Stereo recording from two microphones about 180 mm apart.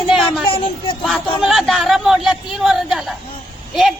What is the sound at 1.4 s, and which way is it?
A woman's voice, centre (ahead or behind).